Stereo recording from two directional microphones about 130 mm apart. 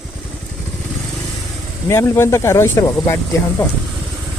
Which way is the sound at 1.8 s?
20° left (ahead or behind).